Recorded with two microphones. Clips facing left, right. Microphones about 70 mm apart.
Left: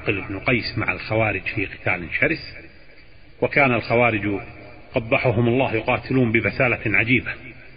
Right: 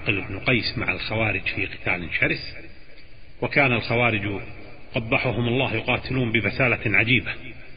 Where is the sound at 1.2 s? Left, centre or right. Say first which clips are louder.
Left 2 dB; centre.